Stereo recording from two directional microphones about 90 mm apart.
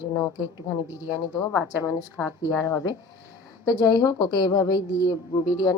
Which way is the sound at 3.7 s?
50° left (ahead or behind).